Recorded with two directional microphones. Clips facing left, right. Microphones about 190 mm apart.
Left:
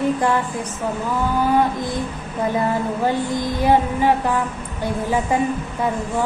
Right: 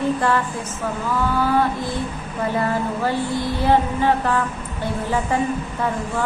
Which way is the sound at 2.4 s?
15° left (ahead or behind).